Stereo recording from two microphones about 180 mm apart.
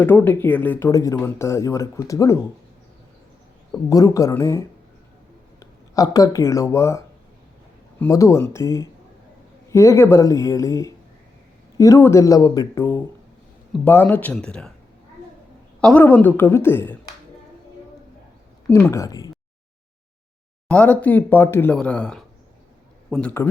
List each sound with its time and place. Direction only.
0.0 s speech: 10° left (ahead or behind)
3.7 s speech: 20° left (ahead or behind)
15.8 s speech: 5° left (ahead or behind)
18.7 s speech: 15° left (ahead or behind)
20.7 s a man's voice: 5° left (ahead or behind)